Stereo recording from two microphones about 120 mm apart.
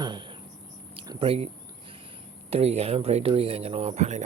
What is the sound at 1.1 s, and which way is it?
Speech, 50° right (ahead or behind).